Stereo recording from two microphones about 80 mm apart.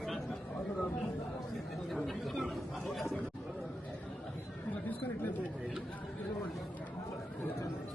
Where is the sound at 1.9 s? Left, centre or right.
Centre.